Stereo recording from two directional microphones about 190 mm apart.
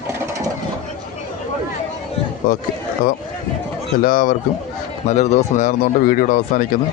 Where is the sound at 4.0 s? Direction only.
50° left (ahead or behind).